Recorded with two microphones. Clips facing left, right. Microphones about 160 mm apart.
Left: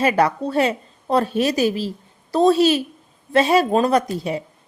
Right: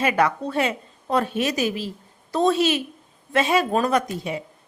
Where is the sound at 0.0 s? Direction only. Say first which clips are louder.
Left 3 dB; 35° left (ahead or behind).